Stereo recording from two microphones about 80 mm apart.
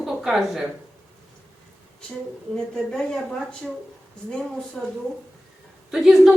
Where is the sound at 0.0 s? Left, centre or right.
Centre.